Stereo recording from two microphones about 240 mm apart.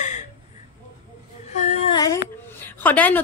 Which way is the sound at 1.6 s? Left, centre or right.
Left.